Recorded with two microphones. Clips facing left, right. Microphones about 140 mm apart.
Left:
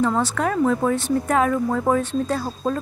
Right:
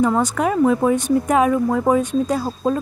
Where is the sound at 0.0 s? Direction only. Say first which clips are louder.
Right 3 dB; 15° right (ahead or behind).